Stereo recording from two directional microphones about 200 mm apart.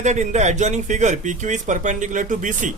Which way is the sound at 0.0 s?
35° right (ahead or behind).